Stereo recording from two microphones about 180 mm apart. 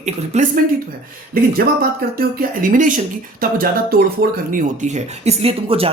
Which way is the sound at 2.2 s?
50° right (ahead or behind).